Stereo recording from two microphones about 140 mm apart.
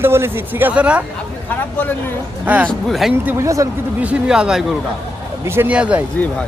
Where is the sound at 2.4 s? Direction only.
10° right (ahead or behind).